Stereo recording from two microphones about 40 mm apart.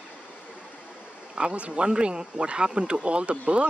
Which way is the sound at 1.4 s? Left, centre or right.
Right.